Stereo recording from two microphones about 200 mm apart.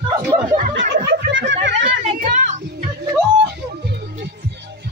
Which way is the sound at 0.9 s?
60° right (ahead or behind).